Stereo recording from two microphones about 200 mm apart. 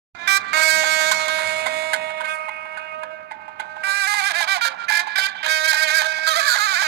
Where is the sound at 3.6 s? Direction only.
55° right (ahead or behind).